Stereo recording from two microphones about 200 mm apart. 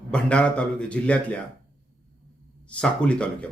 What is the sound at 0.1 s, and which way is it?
Speech, 5° left (ahead or behind).